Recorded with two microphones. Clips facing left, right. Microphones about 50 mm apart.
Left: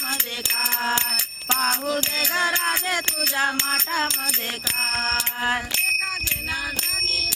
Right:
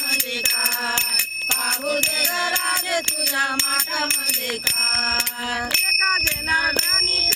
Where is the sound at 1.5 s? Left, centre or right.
Left.